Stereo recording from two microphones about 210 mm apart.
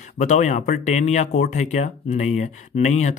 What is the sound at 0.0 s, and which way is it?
Speech, 35° left (ahead or behind).